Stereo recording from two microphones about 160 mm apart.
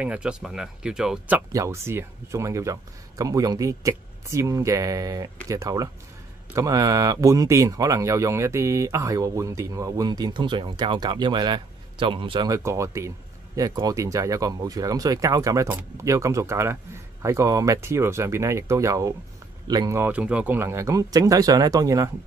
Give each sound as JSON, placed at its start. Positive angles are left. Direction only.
{"t": 0.0, "sound": "speech", "side_deg": -5}
{"t": 1.5, "sound": "speech", "side_deg": -20}
{"t": 12.5, "sound": "speech", "side_deg": -20}
{"t": 20.1, "sound": "speech", "side_deg": -10}